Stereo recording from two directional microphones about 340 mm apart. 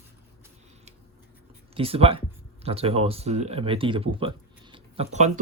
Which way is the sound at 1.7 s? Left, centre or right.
Centre.